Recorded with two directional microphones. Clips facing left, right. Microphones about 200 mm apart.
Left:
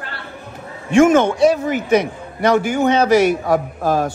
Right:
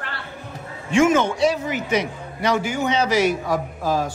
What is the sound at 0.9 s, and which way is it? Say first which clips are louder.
A man's voice: left 5 dB; 55° left (ahead or behind).